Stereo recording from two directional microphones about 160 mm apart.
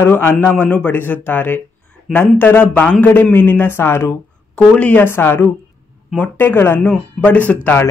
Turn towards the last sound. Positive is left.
turn(degrees=10)  # may be behind; listen again after turning